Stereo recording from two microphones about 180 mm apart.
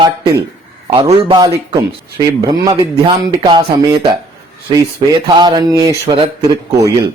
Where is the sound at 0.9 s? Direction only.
30° right (ahead or behind).